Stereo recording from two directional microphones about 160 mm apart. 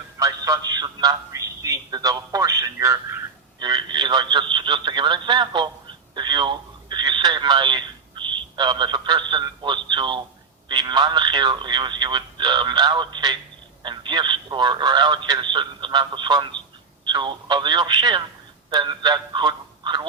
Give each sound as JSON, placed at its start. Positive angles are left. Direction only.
{"t": 0.2, "sound": "a man's voice", "side_deg": -20}